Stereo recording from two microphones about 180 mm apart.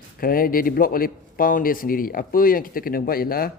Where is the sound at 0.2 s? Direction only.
50° left (ahead or behind).